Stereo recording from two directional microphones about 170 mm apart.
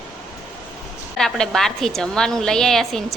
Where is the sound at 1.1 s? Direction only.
5° left (ahead or behind).